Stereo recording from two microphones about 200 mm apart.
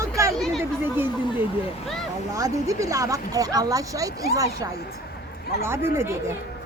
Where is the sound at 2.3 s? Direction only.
15° right (ahead or behind).